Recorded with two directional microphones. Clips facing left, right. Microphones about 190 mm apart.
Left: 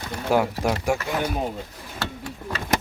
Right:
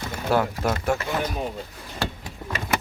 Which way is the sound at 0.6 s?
10° left (ahead or behind).